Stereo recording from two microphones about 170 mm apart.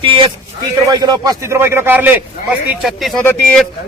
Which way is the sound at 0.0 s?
30° right (ahead or behind).